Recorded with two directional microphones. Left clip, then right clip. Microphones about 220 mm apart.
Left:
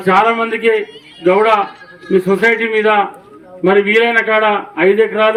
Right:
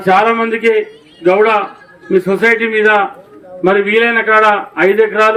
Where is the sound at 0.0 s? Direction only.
40° right (ahead or behind).